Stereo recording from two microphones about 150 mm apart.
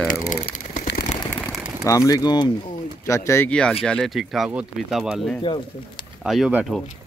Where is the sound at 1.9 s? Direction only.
25° left (ahead or behind).